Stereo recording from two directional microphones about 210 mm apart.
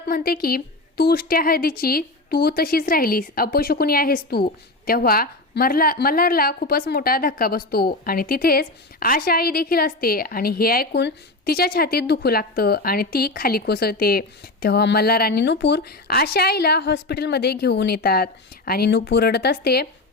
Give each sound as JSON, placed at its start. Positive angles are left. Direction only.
{"t": 0.1, "sound": "a woman's voice", "side_deg": 45}